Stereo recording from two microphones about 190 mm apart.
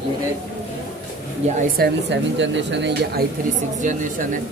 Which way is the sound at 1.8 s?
70° right (ahead or behind).